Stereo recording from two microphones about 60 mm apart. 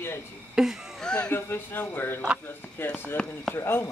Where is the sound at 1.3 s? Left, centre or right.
Left.